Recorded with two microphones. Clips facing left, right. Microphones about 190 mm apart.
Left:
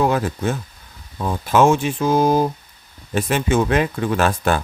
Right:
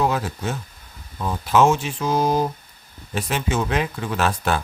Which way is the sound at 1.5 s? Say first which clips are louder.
Left 2 dB; 50° left (ahead or behind).